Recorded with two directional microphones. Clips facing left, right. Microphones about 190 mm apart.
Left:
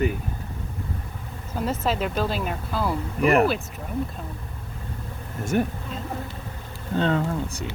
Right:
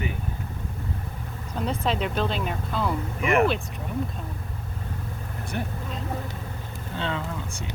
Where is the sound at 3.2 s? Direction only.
35° left (ahead or behind).